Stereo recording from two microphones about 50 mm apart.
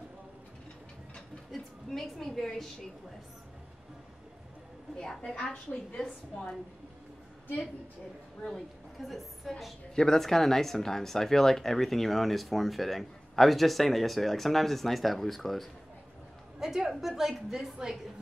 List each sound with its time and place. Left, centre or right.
1.5 s a woman's voice: centre
4.9 s a woman's voice: centre
8.5 s a woman's voice: centre
16.5 s a woman's voice: centre